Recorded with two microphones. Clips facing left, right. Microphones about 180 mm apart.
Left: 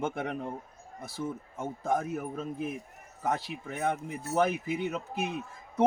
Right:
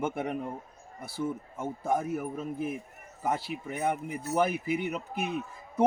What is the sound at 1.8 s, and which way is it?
A man's voice, 10° right (ahead or behind).